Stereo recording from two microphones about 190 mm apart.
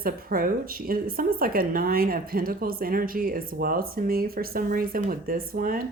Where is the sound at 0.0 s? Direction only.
50° right (ahead or behind).